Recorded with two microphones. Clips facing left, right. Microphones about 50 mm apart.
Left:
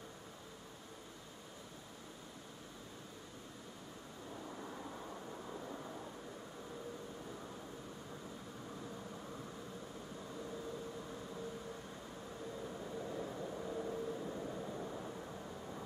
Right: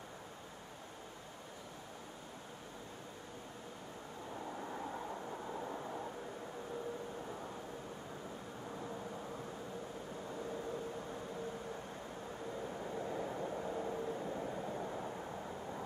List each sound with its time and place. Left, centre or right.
12.7 s vehicle: right